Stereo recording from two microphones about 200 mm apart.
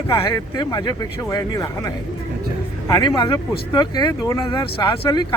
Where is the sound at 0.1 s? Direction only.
20° left (ahead or behind).